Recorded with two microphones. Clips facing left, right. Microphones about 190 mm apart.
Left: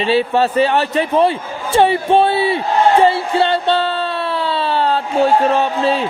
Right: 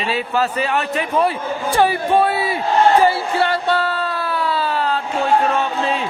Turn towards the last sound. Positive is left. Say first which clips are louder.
# left 4 dB
turn(degrees=35)  # may be behind; listen again after turning